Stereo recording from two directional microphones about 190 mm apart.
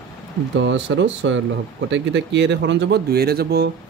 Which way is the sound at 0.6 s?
75° right (ahead or behind).